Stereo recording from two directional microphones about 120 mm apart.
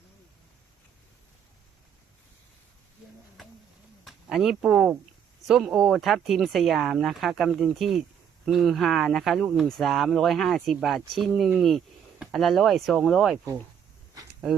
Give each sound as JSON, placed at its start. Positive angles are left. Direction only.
{"t": 4.0, "sound": "speech", "side_deg": -5}